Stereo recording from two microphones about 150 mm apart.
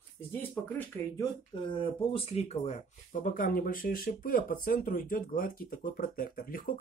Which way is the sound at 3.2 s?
65° left (ahead or behind).